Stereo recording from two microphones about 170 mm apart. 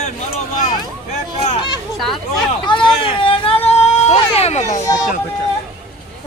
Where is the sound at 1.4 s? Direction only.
35° left (ahead or behind).